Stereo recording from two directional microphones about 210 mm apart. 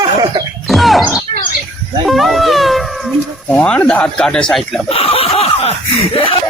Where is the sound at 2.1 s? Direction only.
Centre (ahead or behind).